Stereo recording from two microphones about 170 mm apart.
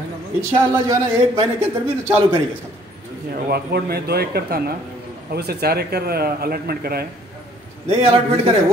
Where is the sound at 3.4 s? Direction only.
70° right (ahead or behind).